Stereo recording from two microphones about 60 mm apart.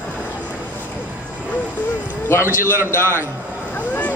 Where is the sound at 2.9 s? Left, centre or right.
Left.